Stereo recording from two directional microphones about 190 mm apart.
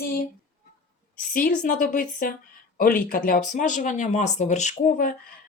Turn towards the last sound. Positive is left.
turn(degrees=45)  # may be behind; listen again after turning